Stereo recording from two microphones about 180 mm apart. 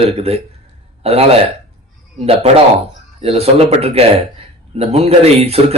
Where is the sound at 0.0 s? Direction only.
35° right (ahead or behind).